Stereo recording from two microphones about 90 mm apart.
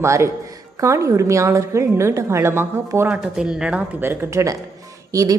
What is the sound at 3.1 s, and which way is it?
Speech, 10° right (ahead or behind).